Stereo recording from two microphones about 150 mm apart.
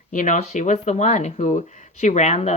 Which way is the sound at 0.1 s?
60° left (ahead or behind).